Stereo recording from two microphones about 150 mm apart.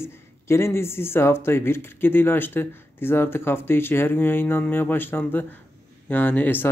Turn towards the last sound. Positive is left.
turn(degrees=10)  # may be behind; listen again after turning